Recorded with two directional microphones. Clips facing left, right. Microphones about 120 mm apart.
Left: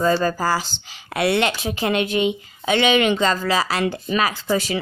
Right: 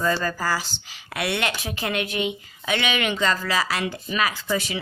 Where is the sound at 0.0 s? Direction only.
30° left (ahead or behind).